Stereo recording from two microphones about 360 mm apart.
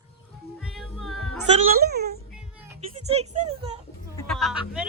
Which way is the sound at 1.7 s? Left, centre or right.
Right.